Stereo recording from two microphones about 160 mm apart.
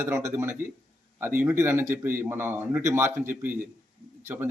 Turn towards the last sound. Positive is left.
turn(degrees=-15)  # may be behind; listen again after turning